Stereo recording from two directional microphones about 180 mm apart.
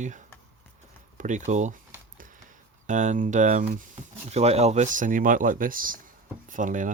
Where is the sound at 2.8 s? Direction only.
45° right (ahead or behind).